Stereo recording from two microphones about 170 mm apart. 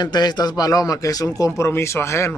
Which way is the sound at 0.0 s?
25° left (ahead or behind).